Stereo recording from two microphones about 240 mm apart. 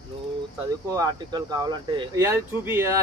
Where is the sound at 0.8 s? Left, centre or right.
Centre.